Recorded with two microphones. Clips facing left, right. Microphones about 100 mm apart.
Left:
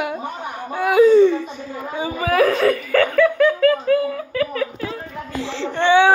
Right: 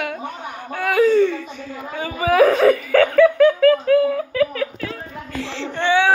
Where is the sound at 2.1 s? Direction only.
10° right (ahead or behind).